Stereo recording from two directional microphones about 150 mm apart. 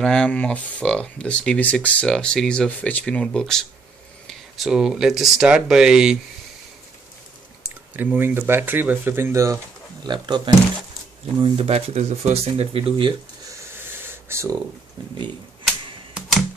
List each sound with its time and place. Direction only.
0.0 s speech: 5° left (ahead or behind)
7.9 s speech: 10° right (ahead or behind)
10.0 s speech: 30° right (ahead or behind)
14.0 s a sound: 20° right (ahead or behind)